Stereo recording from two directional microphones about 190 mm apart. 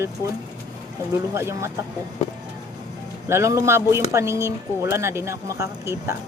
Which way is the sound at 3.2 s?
15° right (ahead or behind).